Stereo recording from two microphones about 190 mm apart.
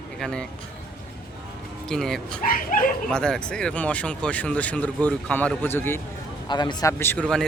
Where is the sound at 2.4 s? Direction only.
45° left (ahead or behind).